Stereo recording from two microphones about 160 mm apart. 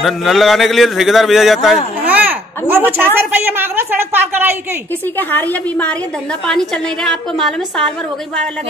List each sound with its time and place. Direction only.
0.0 s speech: centre (ahead or behind)
2.0 s a sound: 10° right (ahead or behind)
2.7 s a woman's voice: 15° right (ahead or behind)
5.1 s a woman's voice: 10° left (ahead or behind)